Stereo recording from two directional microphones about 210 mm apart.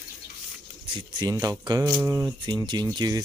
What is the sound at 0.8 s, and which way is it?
Speech, 20° right (ahead or behind).